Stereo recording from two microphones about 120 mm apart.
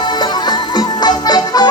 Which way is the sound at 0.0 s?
35° left (ahead or behind).